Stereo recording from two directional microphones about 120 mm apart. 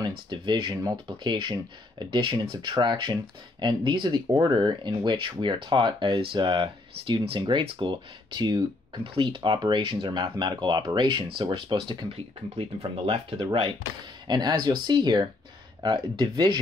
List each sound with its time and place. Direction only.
0.0 s speech: 40° right (ahead or behind)
4.3 s speech: 25° right (ahead or behind)
4.6 s speech: 40° right (ahead or behind)